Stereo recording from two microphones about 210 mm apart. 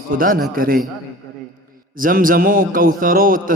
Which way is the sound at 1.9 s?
40° right (ahead or behind).